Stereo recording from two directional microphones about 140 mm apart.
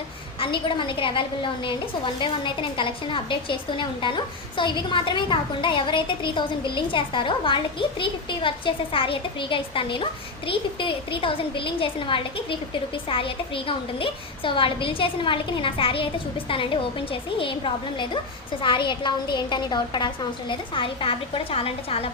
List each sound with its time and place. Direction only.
0.3 s a woman's voice: 35° left (ahead or behind)